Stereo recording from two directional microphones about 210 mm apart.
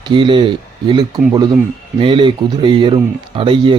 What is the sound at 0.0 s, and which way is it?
Speech, 20° right (ahead or behind).